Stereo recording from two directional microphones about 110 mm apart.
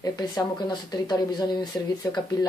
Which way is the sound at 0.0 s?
35° left (ahead or behind).